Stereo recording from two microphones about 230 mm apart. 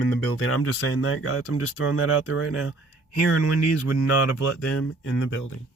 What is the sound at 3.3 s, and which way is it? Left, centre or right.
Speech, left.